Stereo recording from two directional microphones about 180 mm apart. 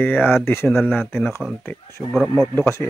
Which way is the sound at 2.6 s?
15° left (ahead or behind).